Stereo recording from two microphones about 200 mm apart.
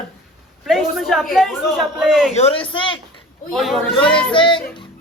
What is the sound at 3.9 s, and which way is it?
Speech, 25° left (ahead or behind).